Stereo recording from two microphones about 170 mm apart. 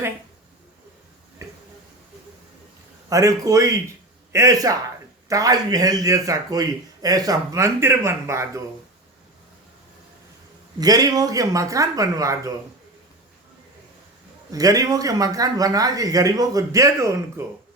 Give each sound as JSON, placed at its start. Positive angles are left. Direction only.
{"t": 3.1, "sound": "a man's voice", "side_deg": -20}
{"t": 10.8, "sound": "a man's voice", "side_deg": -20}
{"t": 14.5, "sound": "a man's voice", "side_deg": -20}